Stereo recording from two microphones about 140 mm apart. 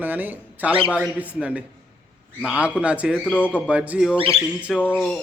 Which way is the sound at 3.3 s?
15° left (ahead or behind).